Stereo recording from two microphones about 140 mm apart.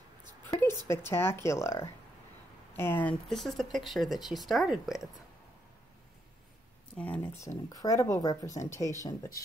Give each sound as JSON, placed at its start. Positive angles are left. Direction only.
{"t": 0.5, "sound": "speech", "side_deg": 20}
{"t": 7.3, "sound": "speech", "side_deg": 25}